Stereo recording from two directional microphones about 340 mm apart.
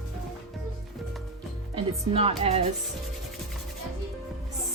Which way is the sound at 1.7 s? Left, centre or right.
Centre.